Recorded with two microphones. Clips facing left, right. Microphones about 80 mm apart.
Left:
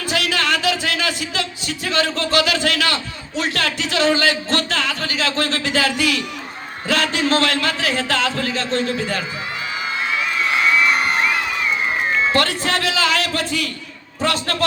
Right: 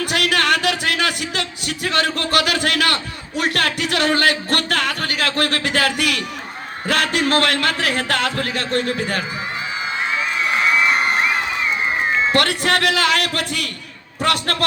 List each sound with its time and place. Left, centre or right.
0.0 s a sound: right
2.1 s a man's voice: right
10.1 s crowd: centre
12.3 s speech: right